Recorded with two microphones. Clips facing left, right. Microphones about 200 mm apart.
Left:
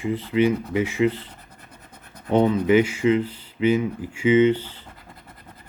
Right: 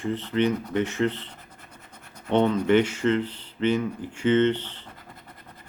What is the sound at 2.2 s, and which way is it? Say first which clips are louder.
Speech: left 2 dB; 5° left (ahead or behind).